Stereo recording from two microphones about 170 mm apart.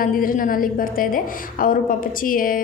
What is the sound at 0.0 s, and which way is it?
A woman's voice, 55° left (ahead or behind).